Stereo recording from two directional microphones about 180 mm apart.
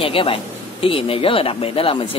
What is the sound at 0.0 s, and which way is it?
A man's voice, 30° left (ahead or behind).